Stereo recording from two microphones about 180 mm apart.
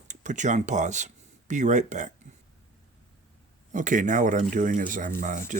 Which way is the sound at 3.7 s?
45° right (ahead or behind).